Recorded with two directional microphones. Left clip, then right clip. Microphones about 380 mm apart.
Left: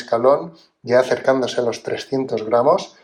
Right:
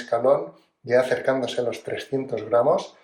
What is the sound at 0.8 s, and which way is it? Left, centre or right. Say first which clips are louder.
Speech: left 5 dB; centre.